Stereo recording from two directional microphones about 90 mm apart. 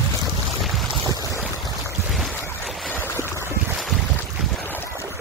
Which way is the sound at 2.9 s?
25° left (ahead or behind).